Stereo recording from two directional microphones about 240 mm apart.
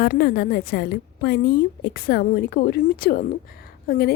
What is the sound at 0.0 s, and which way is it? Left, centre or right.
A woman's voice, left.